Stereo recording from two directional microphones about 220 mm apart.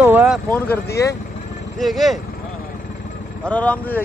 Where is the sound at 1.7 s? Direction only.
Centre (ahead or behind).